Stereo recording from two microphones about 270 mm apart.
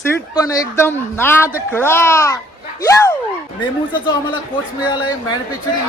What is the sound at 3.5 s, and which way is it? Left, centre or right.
Speech, centre.